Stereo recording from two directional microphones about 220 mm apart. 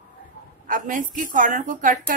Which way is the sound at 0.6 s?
35° right (ahead or behind).